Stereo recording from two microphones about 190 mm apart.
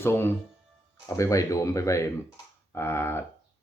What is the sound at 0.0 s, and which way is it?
Speech, 10° left (ahead or behind).